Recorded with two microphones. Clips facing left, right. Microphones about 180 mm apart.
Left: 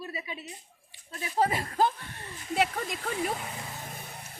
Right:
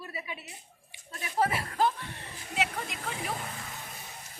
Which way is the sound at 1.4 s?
25° left (ahead or behind).